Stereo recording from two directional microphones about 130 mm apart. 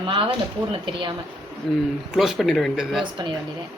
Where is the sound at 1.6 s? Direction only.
5° left (ahead or behind).